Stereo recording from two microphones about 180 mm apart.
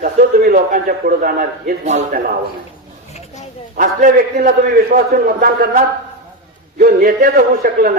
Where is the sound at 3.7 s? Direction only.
50° right (ahead or behind).